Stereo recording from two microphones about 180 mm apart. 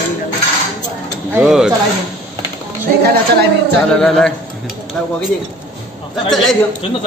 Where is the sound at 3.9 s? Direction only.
5° left (ahead or behind).